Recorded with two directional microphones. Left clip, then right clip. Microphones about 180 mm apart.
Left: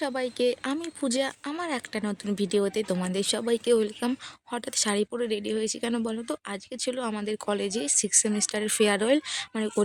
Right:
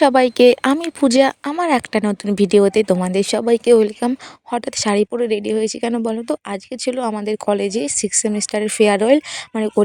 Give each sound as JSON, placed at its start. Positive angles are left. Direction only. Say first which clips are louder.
{"t": 0.0, "sound": "speech", "louder": "right 16 dB", "side_deg": -55}